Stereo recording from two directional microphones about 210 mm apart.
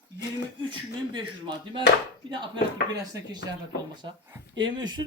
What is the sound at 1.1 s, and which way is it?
Speech, 20° right (ahead or behind).